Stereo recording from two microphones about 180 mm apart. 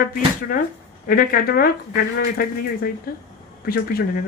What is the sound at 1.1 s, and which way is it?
Speech, 55° left (ahead or behind).